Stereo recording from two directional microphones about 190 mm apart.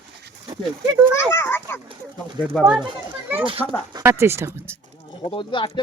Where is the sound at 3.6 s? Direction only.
5° left (ahead or behind).